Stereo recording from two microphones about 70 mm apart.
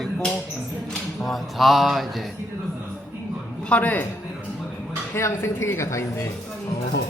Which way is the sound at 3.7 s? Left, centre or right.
Left.